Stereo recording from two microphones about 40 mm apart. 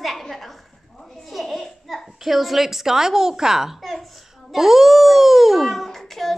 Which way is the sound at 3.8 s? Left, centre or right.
Centre.